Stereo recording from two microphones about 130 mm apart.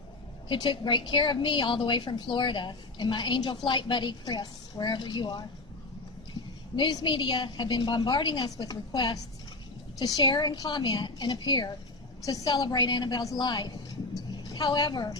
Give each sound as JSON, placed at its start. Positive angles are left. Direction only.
{"t": 0.4, "sound": "a woman's voice", "side_deg": 40}
{"t": 6.7, "sound": "a woman's voice", "side_deg": 40}